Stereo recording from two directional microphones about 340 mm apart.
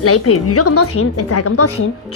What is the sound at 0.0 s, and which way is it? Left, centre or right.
A woman's voice, left.